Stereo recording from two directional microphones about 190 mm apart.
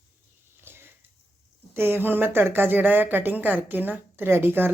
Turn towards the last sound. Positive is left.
turn(degrees=-10)  # may be behind; listen again after turning